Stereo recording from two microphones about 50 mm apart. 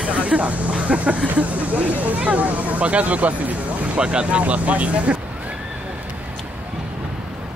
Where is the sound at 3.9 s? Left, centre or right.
Right.